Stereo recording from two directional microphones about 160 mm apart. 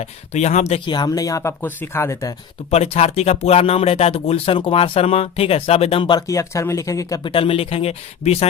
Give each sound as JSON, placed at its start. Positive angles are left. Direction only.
{"t": 0.0, "sound": "speech", "side_deg": 45}
{"t": 0.9, "sound": "speech", "side_deg": 25}
{"t": 2.6, "sound": "speech", "side_deg": 40}
{"t": 7.3, "sound": "speech", "side_deg": 35}